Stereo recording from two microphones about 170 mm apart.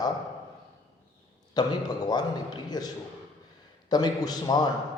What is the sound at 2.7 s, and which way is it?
Speech, 25° left (ahead or behind).